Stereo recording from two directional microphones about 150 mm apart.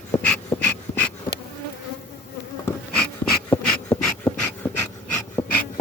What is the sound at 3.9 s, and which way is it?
Dog, 35° left (ahead or behind).